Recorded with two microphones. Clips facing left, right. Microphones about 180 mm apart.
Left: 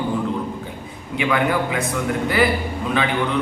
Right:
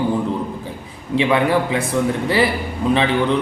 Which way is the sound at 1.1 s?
30° right (ahead or behind).